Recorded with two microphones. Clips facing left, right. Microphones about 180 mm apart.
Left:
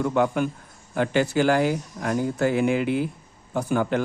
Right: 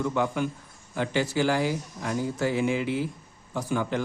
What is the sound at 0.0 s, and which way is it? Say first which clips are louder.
Speech: left 4 dB; 55° left (ahead or behind).